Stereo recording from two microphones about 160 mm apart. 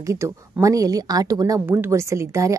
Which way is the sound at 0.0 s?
20° right (ahead or behind).